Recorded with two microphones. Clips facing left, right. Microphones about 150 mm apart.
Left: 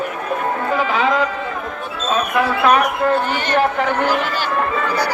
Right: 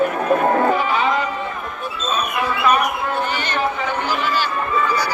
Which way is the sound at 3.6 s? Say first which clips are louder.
Left 6 dB; 70° left (ahead or behind).